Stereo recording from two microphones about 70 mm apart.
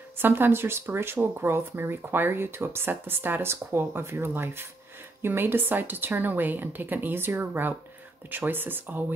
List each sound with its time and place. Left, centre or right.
0.2 s a woman's voice: right